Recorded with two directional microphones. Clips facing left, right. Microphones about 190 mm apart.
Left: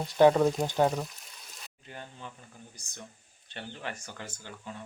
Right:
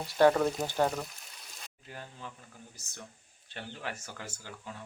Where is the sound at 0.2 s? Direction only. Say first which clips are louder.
Left 3 dB; 15° left (ahead or behind).